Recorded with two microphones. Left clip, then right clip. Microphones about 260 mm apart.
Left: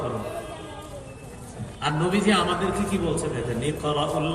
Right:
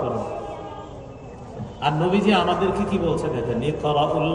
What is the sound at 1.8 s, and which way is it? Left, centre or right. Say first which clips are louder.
A man's voice: right 4 dB; left.